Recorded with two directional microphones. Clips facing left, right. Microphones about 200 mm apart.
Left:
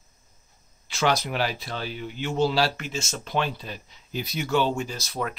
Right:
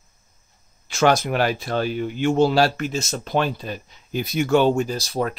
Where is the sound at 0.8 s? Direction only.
45° right (ahead or behind).